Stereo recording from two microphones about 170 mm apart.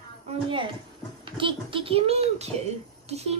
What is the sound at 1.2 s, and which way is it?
Speech, 30° right (ahead or behind).